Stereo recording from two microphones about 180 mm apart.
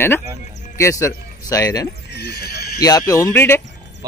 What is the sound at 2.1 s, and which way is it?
Speech, 65° left (ahead or behind).